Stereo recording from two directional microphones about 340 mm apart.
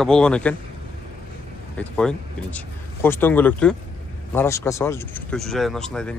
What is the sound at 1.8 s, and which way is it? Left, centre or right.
Speech, centre.